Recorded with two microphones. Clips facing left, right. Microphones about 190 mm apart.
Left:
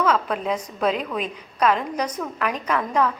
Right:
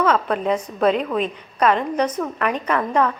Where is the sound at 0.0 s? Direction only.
5° left (ahead or behind).